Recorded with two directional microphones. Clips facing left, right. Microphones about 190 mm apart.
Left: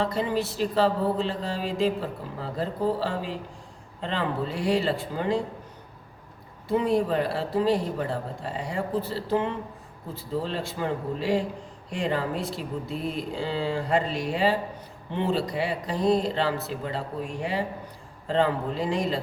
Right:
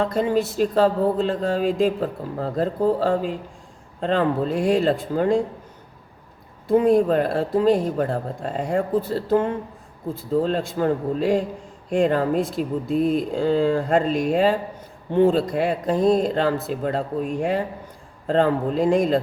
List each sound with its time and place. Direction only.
0.0 s speech: 50° right (ahead or behind)
6.7 s speech: 50° right (ahead or behind)